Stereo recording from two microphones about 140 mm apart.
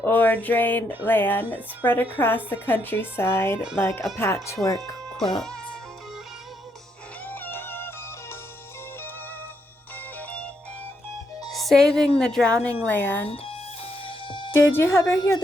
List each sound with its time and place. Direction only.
0.0 s a woman's voice: 15° left (ahead or behind)
5.4 s music: 5° left (ahead or behind)
7.3 s music: 15° left (ahead or behind)
10.2 s music: 10° left (ahead or behind)
11.5 s a woman's voice: centre (ahead or behind)
14.3 s music: 35° left (ahead or behind)
14.7 s speech: 20° left (ahead or behind)